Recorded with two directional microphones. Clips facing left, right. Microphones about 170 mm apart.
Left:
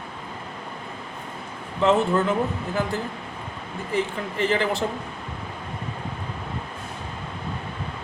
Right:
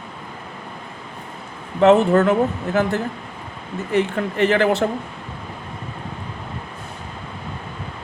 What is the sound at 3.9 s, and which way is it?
Speech, 65° right (ahead or behind).